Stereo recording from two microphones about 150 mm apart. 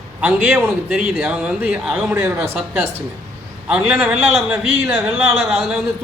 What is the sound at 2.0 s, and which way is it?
Speech, 15° right (ahead or behind).